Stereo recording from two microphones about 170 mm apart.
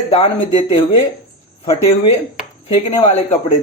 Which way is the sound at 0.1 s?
35° left (ahead or behind).